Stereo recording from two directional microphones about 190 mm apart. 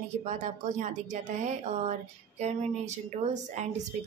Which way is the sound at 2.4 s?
40° right (ahead or behind).